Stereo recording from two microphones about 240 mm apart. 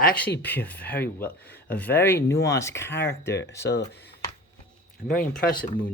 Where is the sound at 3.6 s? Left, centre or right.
Left.